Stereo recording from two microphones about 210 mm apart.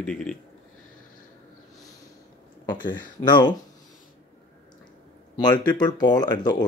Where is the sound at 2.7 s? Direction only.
20° left (ahead or behind).